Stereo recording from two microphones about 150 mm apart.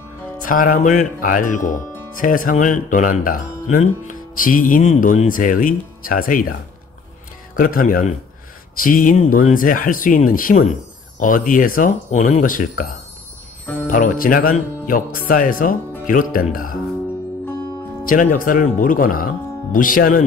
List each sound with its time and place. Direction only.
0.4 s speech: 65° left (ahead or behind)
7.5 s speech: 70° left (ahead or behind)
18.0 s speech: 65° left (ahead or behind)